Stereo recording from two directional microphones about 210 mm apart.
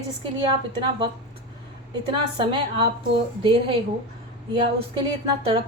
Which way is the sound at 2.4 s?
25° right (ahead or behind).